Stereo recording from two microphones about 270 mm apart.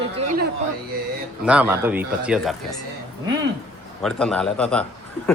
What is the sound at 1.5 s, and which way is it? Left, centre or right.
Speech, centre.